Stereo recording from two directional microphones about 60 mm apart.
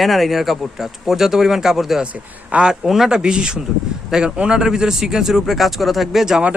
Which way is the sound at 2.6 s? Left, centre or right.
Centre.